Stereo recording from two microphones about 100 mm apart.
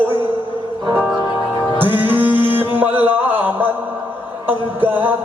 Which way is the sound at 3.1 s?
20° right (ahead or behind).